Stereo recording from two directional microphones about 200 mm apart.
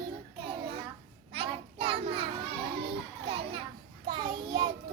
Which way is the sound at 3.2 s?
30° right (ahead or behind).